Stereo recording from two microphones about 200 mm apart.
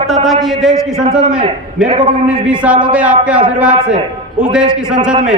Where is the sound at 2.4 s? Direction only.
5° right (ahead or behind).